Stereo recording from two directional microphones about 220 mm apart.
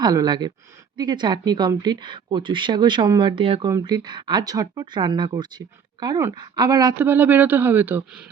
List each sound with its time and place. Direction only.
0.0 s speech: 15° right (ahead or behind)